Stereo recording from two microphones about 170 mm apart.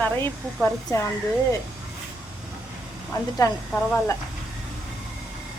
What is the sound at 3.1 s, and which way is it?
Speech, 20° left (ahead or behind).